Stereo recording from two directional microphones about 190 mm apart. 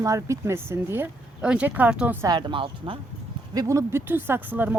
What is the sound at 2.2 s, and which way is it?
Speech, 25° right (ahead or behind).